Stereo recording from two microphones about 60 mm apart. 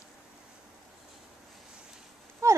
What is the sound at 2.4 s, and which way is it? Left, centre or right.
Clip-clop, right.